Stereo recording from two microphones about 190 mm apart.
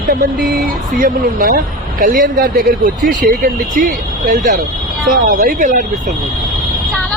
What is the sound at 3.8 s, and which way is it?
Speech, 45° right (ahead or behind).